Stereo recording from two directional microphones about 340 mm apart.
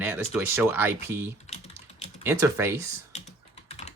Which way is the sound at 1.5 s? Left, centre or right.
Centre.